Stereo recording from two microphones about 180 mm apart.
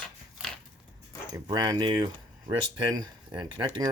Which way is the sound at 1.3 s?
25° right (ahead or behind).